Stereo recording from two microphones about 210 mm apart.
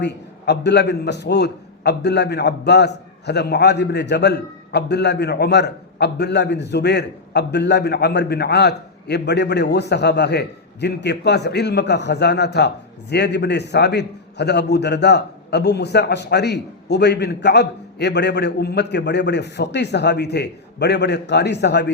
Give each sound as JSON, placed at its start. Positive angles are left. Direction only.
{"t": 0.0, "sound": "a man's voice", "side_deg": 55}